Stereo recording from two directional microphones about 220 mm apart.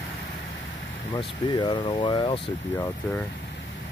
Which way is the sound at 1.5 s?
20° left (ahead or behind).